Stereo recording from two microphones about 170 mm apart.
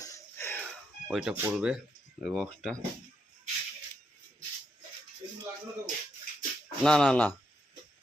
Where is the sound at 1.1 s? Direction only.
Centre (ahead or behind).